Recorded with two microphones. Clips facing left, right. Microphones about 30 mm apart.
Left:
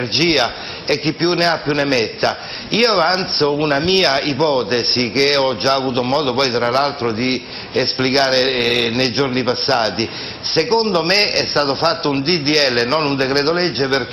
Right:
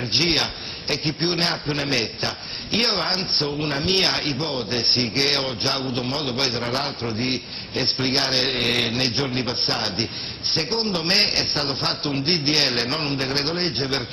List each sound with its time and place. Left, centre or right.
0.1 s a man's voice: centre
3.6 s a man's voice: left